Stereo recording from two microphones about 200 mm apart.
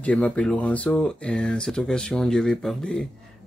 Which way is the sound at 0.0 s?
5° left (ahead or behind).